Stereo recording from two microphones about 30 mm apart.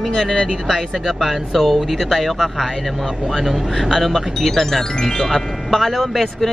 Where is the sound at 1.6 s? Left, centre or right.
Centre.